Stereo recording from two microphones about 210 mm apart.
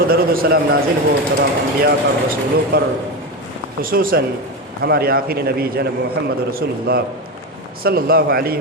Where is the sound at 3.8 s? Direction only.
45° right (ahead or behind).